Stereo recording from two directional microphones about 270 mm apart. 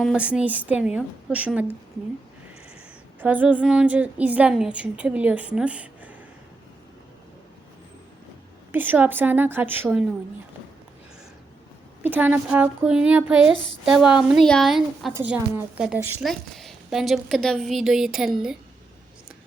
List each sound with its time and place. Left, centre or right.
0.0 s speech: centre
3.2 s speech: centre
8.7 s a woman's voice: centre
12.0 s speech: centre